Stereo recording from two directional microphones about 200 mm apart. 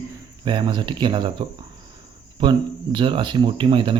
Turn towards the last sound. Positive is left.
turn(degrees=-25)  # may be behind; listen again after turning